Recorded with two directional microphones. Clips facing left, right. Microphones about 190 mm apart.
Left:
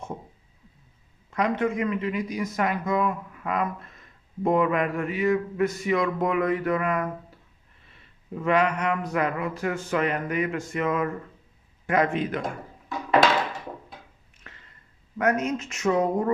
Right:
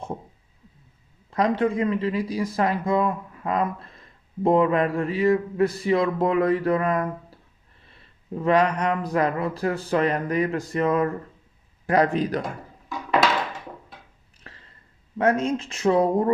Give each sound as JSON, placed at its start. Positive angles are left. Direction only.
{"t": 1.3, "sound": "speech", "side_deg": -35}
{"t": 8.4, "sound": "speech", "side_deg": -35}
{"t": 14.4, "sound": "a sound", "side_deg": -35}
{"t": 15.2, "sound": "speech", "side_deg": -30}